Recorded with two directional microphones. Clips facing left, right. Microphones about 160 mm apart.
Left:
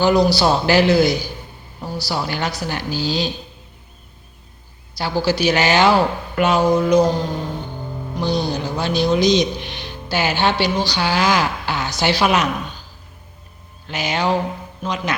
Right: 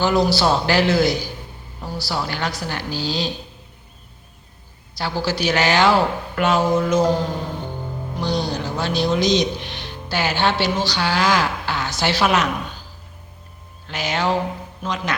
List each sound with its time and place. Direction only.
0.0 s speech: centre (ahead or behind)
4.9 s speech: centre (ahead or behind)
6.7 s mantra: 15° left (ahead or behind)
8.2 s speech: 5° left (ahead or behind)
13.8 s speech: centre (ahead or behind)
14.8 s mantra: 5° left (ahead or behind)